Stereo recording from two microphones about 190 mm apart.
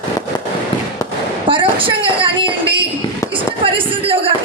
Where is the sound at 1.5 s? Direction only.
25° right (ahead or behind).